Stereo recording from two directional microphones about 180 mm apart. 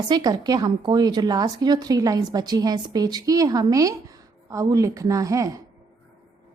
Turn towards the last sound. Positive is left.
turn(degrees=-20)  # may be behind; listen again after turning